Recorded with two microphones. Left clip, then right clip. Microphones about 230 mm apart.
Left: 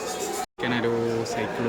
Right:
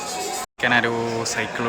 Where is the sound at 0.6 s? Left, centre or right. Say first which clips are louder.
Right 6 dB; centre.